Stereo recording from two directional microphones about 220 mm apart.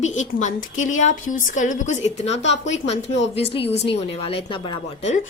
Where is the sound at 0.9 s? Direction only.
65° left (ahead or behind).